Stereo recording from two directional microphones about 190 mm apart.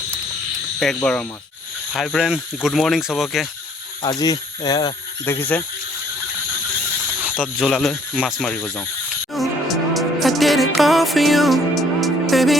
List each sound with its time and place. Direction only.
1.0 s speech: 5° left (ahead or behind)
4.0 s speech: 20° left (ahead or behind)
7.3 s speech: 5° left (ahead or behind)
9.3 s music: centre (ahead or behind)